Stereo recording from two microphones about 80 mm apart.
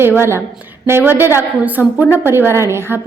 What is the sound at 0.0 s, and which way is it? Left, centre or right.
A woman's voice, right.